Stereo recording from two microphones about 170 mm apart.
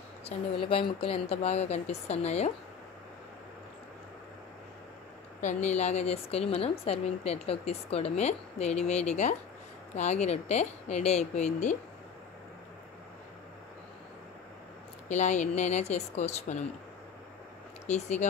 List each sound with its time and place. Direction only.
0.2 s a woman's voice: 35° left (ahead or behind)
5.4 s a woman's voice: 45° left (ahead or behind)
15.0 s speech: 45° left (ahead or behind)
17.8 s a woman's voice: 40° left (ahead or behind)